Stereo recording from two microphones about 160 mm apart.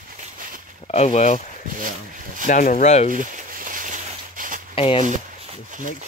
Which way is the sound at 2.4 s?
55° left (ahead or behind).